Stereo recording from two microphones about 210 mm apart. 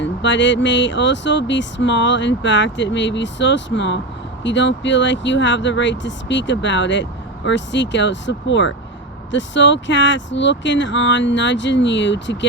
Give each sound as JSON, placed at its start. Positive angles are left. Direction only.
{"t": 0.0, "sound": "speech", "side_deg": 60}